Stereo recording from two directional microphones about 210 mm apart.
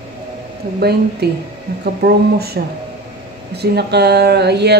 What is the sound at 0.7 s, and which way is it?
Speech, 50° right (ahead or behind).